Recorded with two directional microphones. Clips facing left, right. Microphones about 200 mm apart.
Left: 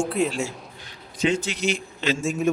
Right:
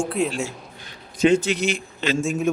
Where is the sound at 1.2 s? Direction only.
55° right (ahead or behind).